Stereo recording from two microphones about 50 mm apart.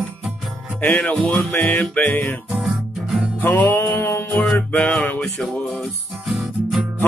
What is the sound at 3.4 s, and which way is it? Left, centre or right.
Music, left.